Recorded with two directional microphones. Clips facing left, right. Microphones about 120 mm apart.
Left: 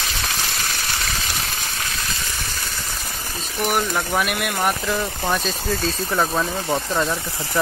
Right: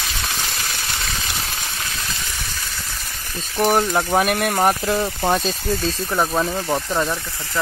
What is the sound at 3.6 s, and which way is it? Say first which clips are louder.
Speech: right 4 dB; 30° right (ahead or behind).